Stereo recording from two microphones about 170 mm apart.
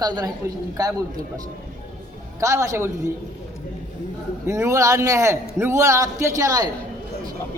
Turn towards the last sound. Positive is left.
turn(degrees=-20)  # may be behind; listen again after turning